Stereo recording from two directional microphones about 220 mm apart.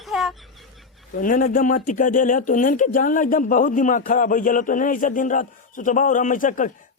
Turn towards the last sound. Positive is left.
turn(degrees=35)  # may be behind; listen again after turning